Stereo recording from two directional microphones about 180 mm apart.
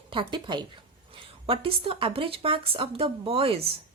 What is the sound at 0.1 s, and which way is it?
A woman's voice, 25° right (ahead or behind).